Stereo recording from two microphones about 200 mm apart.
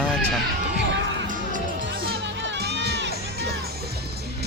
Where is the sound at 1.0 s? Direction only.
65° right (ahead or behind).